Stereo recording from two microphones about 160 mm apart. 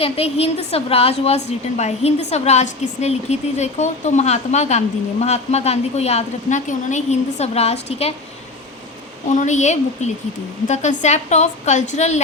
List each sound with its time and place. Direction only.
0.0 s a woman's voice: 40° left (ahead or behind)
9.3 s a woman's voice: 50° left (ahead or behind)